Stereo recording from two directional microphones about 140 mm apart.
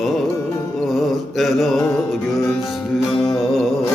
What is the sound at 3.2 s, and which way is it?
Mantra, 5° left (ahead or behind).